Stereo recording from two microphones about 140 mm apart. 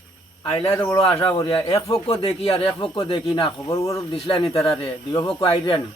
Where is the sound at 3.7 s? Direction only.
25° left (ahead or behind).